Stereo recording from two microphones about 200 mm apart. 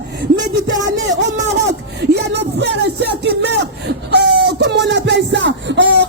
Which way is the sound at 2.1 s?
60° right (ahead or behind).